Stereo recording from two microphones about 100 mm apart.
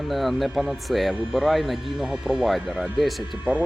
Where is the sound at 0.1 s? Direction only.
Centre (ahead or behind).